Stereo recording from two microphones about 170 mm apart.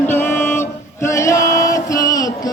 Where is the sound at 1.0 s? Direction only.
15° left (ahead or behind).